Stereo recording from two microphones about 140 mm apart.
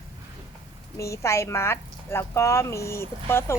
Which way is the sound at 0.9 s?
20° left (ahead or behind).